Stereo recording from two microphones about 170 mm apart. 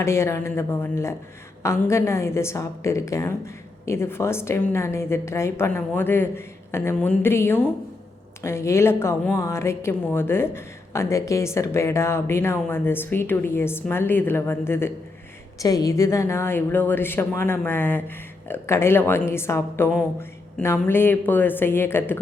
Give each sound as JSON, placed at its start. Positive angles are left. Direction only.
{"t": 0.0, "sound": "a woman's voice", "side_deg": 15}